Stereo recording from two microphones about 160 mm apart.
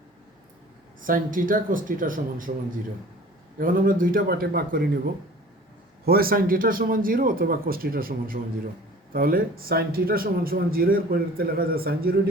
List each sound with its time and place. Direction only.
1.0 s speech: 60° right (ahead or behind)
3.6 s speech: 60° right (ahead or behind)
6.1 s a man's voice: 65° right (ahead or behind)